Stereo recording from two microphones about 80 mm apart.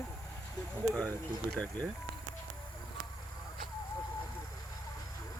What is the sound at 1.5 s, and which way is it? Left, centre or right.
Speech, centre.